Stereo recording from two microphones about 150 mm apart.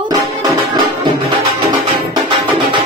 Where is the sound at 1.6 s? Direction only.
30° right (ahead or behind).